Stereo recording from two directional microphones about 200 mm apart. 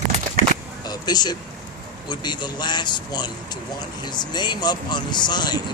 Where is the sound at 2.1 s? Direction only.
20° left (ahead or behind).